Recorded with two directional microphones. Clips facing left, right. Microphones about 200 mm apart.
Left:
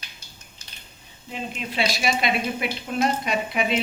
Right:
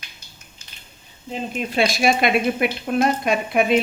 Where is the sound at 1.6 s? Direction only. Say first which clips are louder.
Right 6 dB; 50° right (ahead or behind).